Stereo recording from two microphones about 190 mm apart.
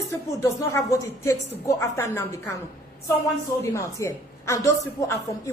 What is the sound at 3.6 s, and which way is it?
A woman's voice, 15° left (ahead or behind).